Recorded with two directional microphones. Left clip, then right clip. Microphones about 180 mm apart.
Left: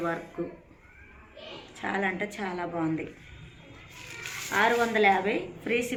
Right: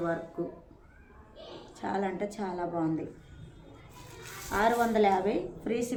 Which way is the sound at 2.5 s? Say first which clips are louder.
Even; 5° left (ahead or behind).